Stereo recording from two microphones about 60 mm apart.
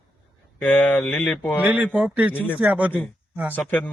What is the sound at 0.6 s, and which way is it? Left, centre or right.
Speech, left.